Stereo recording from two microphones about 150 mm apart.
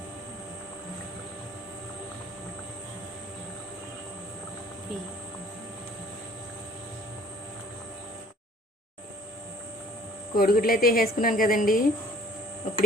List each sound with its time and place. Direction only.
10.3 s a woman's voice: 75° left (ahead or behind)